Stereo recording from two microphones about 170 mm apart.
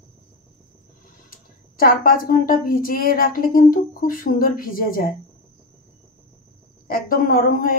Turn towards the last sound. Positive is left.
turn(degrees=55)  # may be behind; listen again after turning